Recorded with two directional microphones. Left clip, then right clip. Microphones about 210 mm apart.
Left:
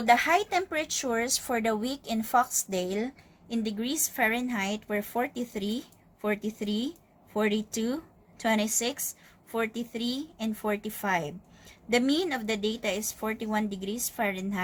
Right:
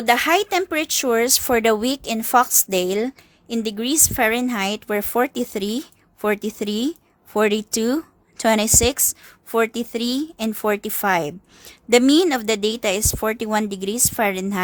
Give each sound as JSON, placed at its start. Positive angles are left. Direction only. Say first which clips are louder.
{"t": 0.0, "sound": "speech", "louder": "right 6 dB", "side_deg": -50}